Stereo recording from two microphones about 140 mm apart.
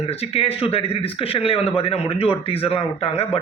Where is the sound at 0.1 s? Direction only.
45° left (ahead or behind).